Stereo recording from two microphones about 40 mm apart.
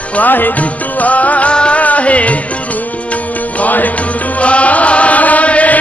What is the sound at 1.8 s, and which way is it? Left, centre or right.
Music, left.